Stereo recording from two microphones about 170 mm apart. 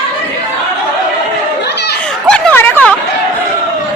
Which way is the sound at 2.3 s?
5° left (ahead or behind).